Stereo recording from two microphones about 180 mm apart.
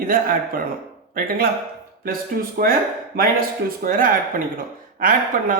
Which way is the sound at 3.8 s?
50° right (ahead or behind).